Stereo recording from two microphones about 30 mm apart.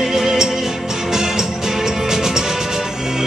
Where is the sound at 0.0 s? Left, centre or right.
Centre.